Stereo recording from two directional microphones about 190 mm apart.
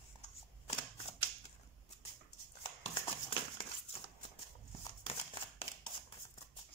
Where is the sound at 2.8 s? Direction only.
25° left (ahead or behind).